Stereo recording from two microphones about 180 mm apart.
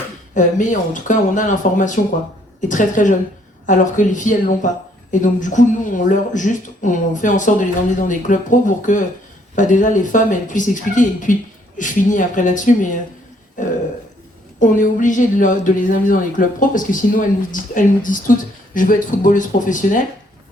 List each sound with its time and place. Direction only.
0.3 s a woman's voice: 45° left (ahead or behind)